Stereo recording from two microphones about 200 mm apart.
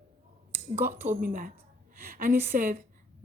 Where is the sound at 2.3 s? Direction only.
35° right (ahead or behind).